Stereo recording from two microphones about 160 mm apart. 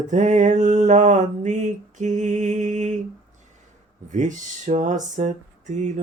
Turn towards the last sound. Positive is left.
turn(degrees=-50)  # may be behind; listen again after turning